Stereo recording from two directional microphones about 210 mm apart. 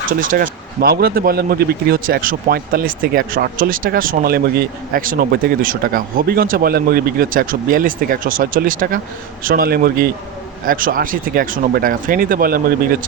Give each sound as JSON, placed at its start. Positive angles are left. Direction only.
{"t": 0.2, "sound": "a man's voice", "side_deg": -40}